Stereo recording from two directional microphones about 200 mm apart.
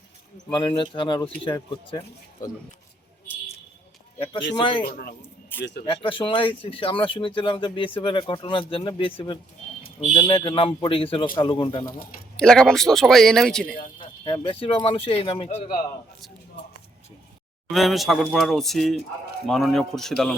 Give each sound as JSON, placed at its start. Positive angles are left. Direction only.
{"t": 0.5, "sound": "speech", "side_deg": 25}
{"t": 4.6, "sound": "speech", "side_deg": 25}
{"t": 4.9, "sound": "a man's voice", "side_deg": 50}
{"t": 5.8, "sound": "speech", "side_deg": 25}
{"t": 12.4, "sound": "a man's voice", "side_deg": 5}
{"t": 14.0, "sound": "a man's voice", "side_deg": 25}
{"t": 17.7, "sound": "a man's voice", "side_deg": 0}